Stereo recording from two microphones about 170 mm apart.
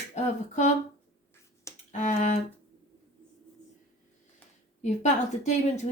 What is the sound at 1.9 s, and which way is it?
Speech, 45° left (ahead or behind).